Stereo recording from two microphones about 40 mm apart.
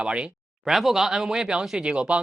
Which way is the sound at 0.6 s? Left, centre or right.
Centre.